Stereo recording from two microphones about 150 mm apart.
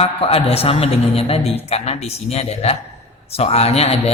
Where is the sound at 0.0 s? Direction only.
40° left (ahead or behind).